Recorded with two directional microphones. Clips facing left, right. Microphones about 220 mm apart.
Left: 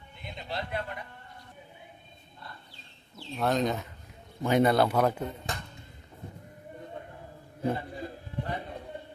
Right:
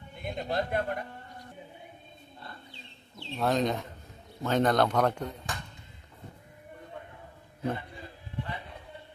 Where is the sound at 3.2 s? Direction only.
Centre (ahead or behind).